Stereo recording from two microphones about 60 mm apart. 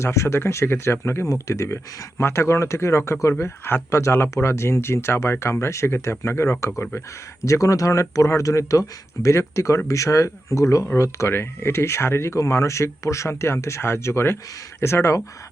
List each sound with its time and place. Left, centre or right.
0.0 s speech: left
7.4 s speech: left
12.4 s speech: left